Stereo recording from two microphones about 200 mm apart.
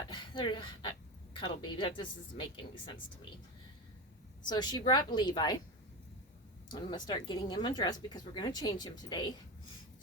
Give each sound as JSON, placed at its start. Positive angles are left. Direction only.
{"t": 0.1, "sound": "speech", "side_deg": 25}
{"t": 4.4, "sound": "speech", "side_deg": 20}
{"t": 6.7, "sound": "speech", "side_deg": 20}